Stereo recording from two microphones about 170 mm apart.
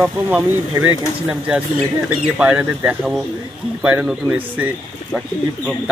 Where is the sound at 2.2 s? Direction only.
10° right (ahead or behind).